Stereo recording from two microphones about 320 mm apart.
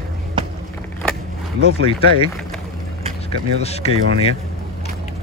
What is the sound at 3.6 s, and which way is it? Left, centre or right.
Speech, centre.